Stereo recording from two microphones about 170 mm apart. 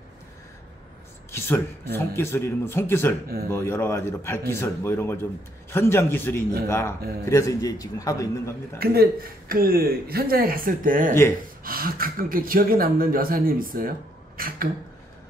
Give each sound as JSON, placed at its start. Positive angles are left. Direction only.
{"t": 1.3, "sound": "a man's voice", "side_deg": 15}
{"t": 8.7, "sound": "speech", "side_deg": -65}